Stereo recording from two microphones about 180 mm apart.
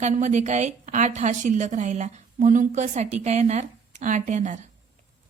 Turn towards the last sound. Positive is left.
turn(degrees=-40)  # may be behind; listen again after turning